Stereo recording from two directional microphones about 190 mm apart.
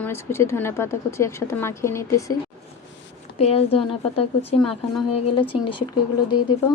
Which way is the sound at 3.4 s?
30° left (ahead or behind).